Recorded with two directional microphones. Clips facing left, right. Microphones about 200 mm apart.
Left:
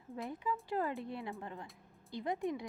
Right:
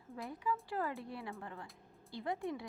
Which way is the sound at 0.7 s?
20° left (ahead or behind).